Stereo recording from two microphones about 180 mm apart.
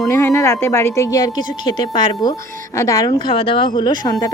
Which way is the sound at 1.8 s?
25° left (ahead or behind).